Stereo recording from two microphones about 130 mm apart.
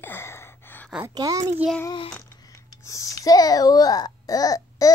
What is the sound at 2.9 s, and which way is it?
Speech, 25° left (ahead or behind).